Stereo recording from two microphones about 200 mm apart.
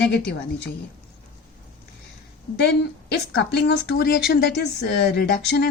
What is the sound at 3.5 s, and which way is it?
Speech, 55° left (ahead or behind).